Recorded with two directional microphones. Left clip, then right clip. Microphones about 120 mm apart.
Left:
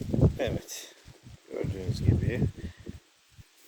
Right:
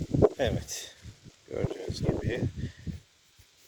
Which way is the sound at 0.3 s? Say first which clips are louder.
Right 2 dB; 15° left (ahead or behind).